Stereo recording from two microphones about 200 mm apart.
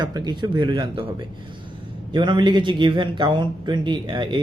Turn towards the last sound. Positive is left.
turn(degrees=-25)  # may be behind; listen again after turning